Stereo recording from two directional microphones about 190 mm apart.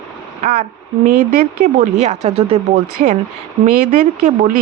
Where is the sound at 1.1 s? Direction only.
40° right (ahead or behind).